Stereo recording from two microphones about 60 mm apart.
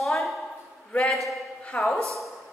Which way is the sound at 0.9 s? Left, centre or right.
Centre.